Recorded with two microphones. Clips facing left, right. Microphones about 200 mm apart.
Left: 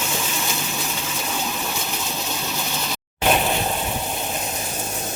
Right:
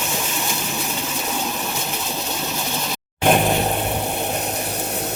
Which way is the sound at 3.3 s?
50° right (ahead or behind).